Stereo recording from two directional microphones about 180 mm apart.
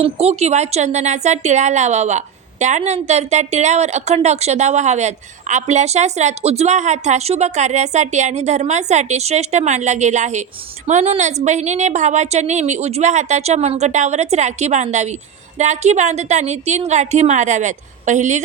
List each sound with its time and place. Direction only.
0.0 s a woman's voice: 35° right (ahead or behind)